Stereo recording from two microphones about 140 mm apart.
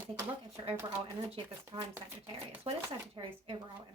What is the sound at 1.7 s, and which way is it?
Speech, 40° right (ahead or behind).